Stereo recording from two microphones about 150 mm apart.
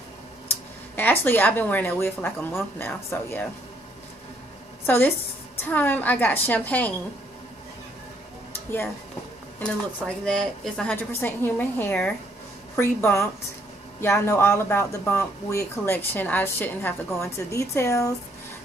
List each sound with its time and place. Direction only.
0.5 s speech: 10° left (ahead or behind)
4.8 s a woman's voice: 10° left (ahead or behind)
8.5 s speech: 15° left (ahead or behind)